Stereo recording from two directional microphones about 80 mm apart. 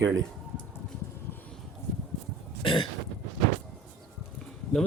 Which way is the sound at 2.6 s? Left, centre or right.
Left.